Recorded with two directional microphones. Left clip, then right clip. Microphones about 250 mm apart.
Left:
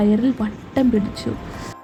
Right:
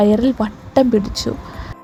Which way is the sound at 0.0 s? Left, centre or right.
Right.